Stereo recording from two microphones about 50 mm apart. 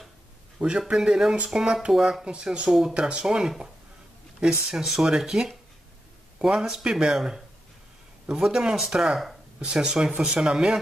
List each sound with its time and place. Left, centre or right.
0.6 s speech: centre
2.2 s speech: centre